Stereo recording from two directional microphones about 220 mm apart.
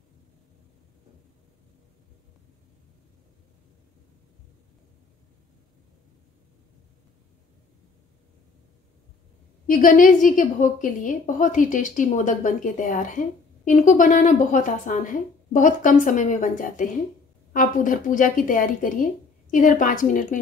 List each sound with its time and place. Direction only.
9.7 s a woman's voice: 40° left (ahead or behind)